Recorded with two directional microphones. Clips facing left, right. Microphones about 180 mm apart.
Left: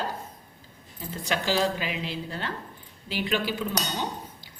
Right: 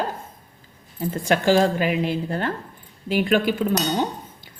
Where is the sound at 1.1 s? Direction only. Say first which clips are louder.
Right 9 dB; 50° right (ahead or behind).